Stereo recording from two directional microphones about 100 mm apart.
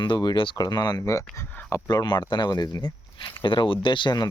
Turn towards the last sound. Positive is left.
turn(degrees=50)  # may be behind; listen again after turning